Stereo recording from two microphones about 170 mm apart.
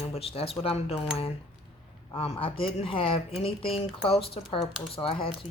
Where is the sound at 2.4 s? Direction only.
30° left (ahead or behind).